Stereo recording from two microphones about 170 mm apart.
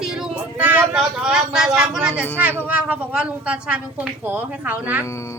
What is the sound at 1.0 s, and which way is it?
A woman's voice, 5° right (ahead or behind).